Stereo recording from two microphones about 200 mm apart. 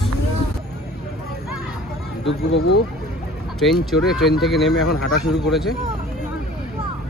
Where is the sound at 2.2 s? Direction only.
60° left (ahead or behind).